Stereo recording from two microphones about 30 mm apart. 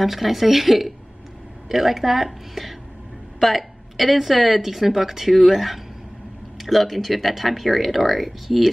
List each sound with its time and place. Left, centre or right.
0.0 s speech: centre